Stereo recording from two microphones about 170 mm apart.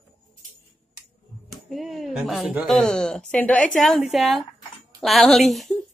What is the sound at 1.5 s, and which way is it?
A woman's voice, centre (ahead or behind).